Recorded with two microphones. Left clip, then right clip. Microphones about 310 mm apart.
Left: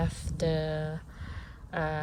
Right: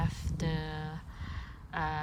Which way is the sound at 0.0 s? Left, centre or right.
Centre.